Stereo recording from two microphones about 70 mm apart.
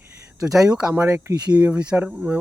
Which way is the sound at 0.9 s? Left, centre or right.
Right.